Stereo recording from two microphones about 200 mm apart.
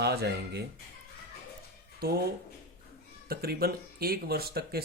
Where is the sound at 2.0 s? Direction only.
50° right (ahead or behind).